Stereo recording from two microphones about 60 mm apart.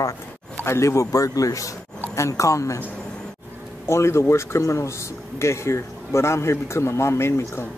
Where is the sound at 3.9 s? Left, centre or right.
Left.